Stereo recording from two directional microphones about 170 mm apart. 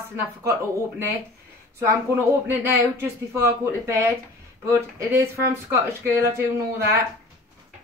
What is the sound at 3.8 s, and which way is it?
Speech, 15° right (ahead or behind).